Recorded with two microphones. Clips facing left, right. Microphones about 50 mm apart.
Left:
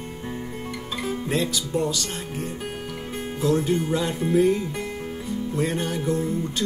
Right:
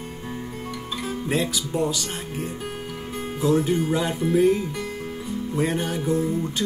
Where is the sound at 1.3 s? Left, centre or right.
Centre.